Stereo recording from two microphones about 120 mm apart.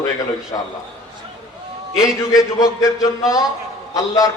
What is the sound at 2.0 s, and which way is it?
Speech, 5° right (ahead or behind).